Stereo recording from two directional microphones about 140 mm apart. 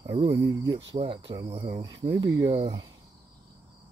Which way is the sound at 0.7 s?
40° right (ahead or behind).